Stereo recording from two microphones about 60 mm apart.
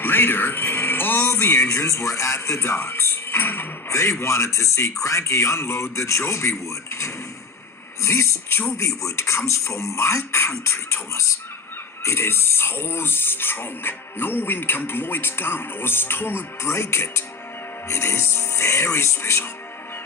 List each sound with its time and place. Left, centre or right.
0.0 s speech: left
3.8 s a man's voice: left